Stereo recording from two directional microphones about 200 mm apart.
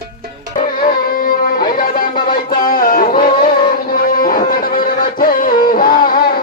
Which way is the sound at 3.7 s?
45° left (ahead or behind).